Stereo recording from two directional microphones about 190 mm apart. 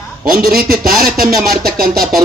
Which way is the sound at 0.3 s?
50° right (ahead or behind).